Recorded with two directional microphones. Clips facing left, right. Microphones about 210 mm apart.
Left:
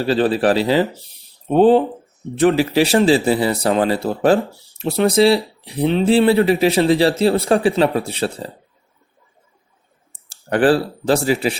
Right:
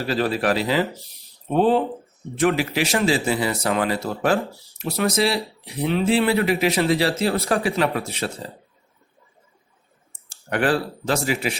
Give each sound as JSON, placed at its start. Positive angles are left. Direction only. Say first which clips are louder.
{"t": 0.0, "sound": "speech", "louder": "left 6 dB", "side_deg": 30}
{"t": 0.9, "sound": "speech", "louder": "left 1 dB", "side_deg": 0}
{"t": 1.5, "sound": "a man's voice", "louder": "left 6 dB", "side_deg": 30}
{"t": 10.2, "sound": "clicking", "louder": "left 7 dB", "side_deg": 35}
{"t": 11.0, "sound": "speech", "louder": "left 6 dB", "side_deg": 35}